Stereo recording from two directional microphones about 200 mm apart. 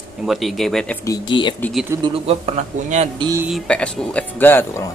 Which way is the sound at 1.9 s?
25° right (ahead or behind).